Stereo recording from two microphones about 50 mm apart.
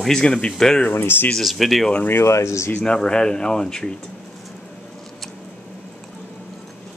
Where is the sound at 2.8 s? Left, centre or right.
Centre.